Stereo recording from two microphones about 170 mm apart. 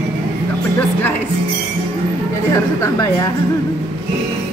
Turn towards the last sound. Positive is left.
turn(degrees=20)  # may be behind; listen again after turning